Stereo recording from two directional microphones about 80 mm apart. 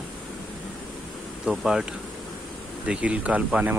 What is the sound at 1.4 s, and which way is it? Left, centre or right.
Speech, centre.